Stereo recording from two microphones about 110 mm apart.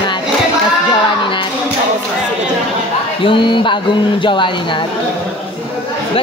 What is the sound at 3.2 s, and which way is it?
Speech, 50° left (ahead or behind).